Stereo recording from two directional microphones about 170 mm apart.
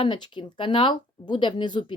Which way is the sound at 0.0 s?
25° left (ahead or behind).